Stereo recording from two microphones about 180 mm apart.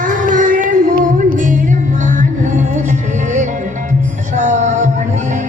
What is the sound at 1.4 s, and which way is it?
Music, 45° right (ahead or behind).